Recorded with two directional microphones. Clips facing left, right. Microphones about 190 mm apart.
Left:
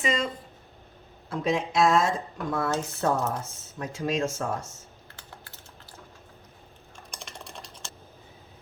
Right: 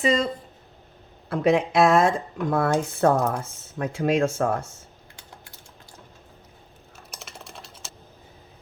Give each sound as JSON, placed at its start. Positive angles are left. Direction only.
{"t": 0.0, "sound": "speech", "side_deg": -35}
{"t": 1.3, "sound": "speech", "side_deg": -60}
{"t": 7.1, "sound": "typing", "side_deg": -5}